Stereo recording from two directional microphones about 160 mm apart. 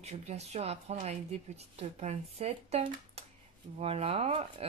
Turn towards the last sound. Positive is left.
turn(degrees=-40)  # may be behind; listen again after turning